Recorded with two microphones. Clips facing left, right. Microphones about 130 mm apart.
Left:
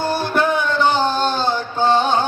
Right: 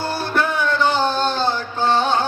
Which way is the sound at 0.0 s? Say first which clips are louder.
Left 3 dB; 20° left (ahead or behind).